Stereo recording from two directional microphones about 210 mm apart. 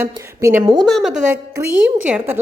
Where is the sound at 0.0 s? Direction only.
10° right (ahead or behind).